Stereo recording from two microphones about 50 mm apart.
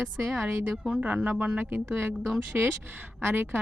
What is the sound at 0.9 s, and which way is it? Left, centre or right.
Speech, right.